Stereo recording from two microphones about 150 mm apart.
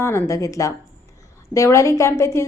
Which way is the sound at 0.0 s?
15° left (ahead or behind).